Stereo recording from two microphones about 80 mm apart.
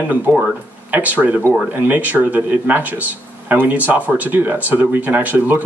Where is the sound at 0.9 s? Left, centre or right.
Right.